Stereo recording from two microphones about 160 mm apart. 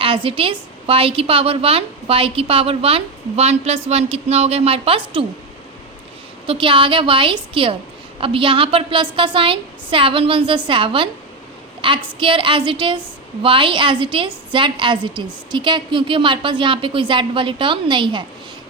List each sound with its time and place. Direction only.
0.0 s a woman's voice: 35° right (ahead or behind)
6.5 s a woman's voice: 35° right (ahead or behind)